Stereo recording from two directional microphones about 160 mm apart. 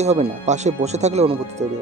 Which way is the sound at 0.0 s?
45° right (ahead or behind).